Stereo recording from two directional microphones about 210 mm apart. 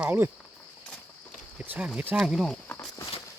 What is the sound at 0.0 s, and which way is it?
Speech, 10° right (ahead or behind).